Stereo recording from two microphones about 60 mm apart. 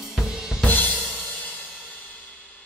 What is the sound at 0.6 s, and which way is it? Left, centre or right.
Drum kit, left.